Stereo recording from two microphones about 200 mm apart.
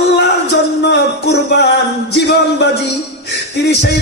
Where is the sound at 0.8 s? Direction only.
55° left (ahead or behind).